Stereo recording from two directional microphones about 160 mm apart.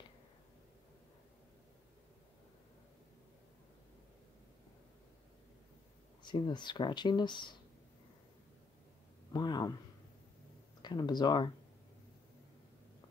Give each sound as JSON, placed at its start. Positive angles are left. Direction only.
{"t": 6.2, "sound": "speech", "side_deg": 30}
{"t": 9.3, "sound": "speech", "side_deg": 25}
{"t": 10.8, "sound": "speech", "side_deg": 25}